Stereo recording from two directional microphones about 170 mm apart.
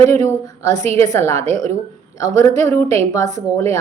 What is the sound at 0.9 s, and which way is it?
Speech, 20° left (ahead or behind).